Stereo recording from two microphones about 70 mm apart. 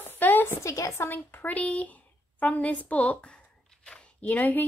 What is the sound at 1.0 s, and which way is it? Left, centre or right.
Speech, left.